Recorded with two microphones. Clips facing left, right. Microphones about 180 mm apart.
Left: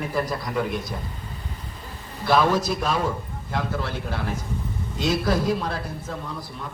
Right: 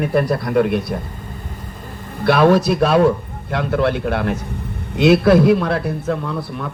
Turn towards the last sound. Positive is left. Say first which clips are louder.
# right 9 dB
turn(degrees=-65)  # may be behind; listen again after turning